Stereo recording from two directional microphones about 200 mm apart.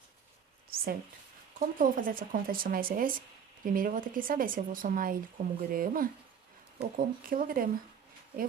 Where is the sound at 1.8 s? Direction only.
45° right (ahead or behind).